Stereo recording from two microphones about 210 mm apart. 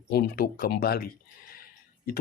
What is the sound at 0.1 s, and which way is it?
Speech, 45° left (ahead or behind).